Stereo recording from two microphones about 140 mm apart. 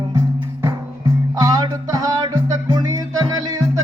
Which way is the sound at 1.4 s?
30° right (ahead or behind).